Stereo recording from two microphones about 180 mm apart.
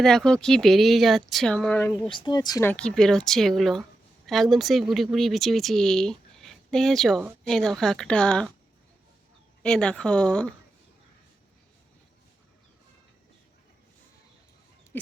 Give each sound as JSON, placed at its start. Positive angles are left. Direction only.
{"t": 0.0, "sound": "speech", "side_deg": 5}
{"t": 2.0, "sound": "speech", "side_deg": 25}
{"t": 2.6, "sound": "speech", "side_deg": 5}
{"t": 9.6, "sound": "speech", "side_deg": 5}